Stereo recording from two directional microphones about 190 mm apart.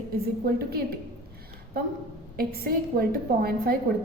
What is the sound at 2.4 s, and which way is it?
A woman's voice, 55° right (ahead or behind).